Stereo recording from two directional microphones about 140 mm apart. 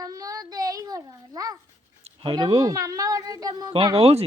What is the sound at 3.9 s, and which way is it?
Speech, 45° right (ahead or behind).